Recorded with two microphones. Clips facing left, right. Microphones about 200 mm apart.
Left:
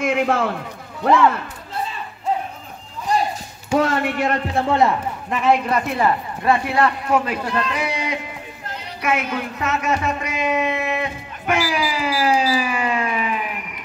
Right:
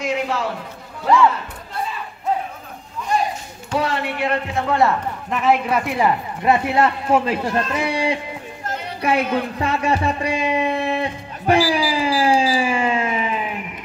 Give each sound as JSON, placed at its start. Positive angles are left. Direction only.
{"t": 0.0, "sound": "a sound", "side_deg": 55}
{"t": 1.0, "sound": "speech", "side_deg": 55}
{"t": 3.7, "sound": "speech", "side_deg": 45}
{"t": 4.6, "sound": "a man's voice", "side_deg": 20}
{"t": 5.3, "sound": "a man's voice", "side_deg": 0}
{"t": 7.4, "sound": "speech", "side_deg": -45}
{"t": 7.7, "sound": "speech", "side_deg": -30}
{"t": 9.0, "sound": "a sound", "side_deg": -30}